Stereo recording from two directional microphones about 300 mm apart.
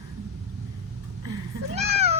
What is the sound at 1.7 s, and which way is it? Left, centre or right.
Cat, right.